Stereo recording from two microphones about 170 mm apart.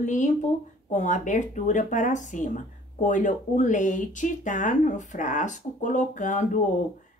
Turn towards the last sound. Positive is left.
turn(degrees=45)  # may be behind; listen again after turning